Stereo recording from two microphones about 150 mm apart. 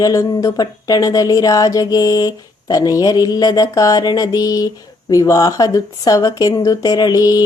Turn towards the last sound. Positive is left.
turn(degrees=25)  # may be behind; listen again after turning